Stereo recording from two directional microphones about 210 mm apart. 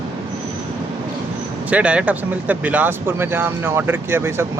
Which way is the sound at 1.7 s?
5° right (ahead or behind).